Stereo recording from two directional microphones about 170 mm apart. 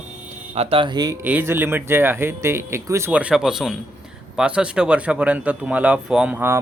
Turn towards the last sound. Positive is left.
turn(degrees=-10)  # may be behind; listen again after turning